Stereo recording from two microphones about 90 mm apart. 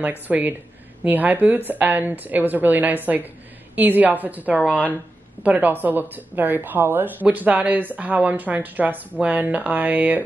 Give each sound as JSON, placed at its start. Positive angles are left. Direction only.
{"t": 0.0, "sound": "speech", "side_deg": -20}